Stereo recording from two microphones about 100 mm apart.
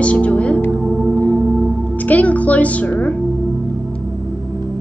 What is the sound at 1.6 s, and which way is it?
Speech, 15° left (ahead or behind).